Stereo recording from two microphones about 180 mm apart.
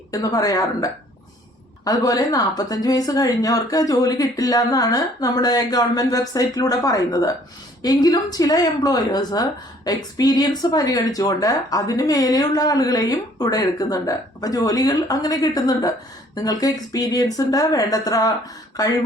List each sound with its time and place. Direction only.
0.1 s speech: 20° left (ahead or behind)